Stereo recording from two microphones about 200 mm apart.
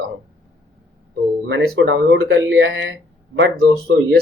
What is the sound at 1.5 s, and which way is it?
Speech, 60° right (ahead or behind).